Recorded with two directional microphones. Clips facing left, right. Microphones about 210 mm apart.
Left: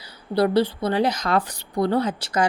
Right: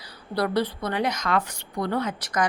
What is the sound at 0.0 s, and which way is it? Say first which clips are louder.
A woman's voice: left 6 dB; 25° left (ahead or behind).